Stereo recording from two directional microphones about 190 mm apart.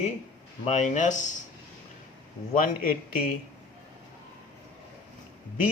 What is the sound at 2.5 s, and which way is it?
Speech, 45° left (ahead or behind).